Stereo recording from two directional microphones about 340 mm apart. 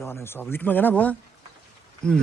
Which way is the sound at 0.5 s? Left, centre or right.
Centre.